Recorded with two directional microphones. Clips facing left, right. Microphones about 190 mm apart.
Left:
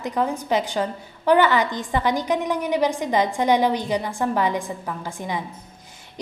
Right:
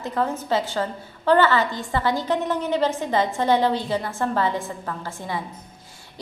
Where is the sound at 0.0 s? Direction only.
15° left (ahead or behind).